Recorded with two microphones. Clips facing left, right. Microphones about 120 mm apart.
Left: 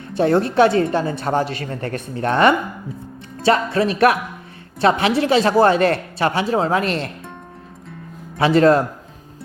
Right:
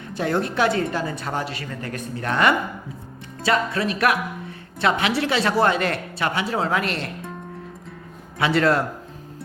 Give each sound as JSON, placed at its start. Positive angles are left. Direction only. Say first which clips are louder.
{"t": 0.2, "sound": "speech", "louder": "left 7 dB", "side_deg": 30}
{"t": 8.4, "sound": "speech", "louder": "left 6 dB", "side_deg": 25}